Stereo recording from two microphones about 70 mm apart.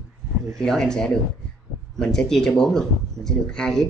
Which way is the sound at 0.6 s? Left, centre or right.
Centre.